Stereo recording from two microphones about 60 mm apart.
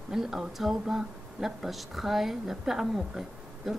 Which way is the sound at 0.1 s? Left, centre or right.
Centre.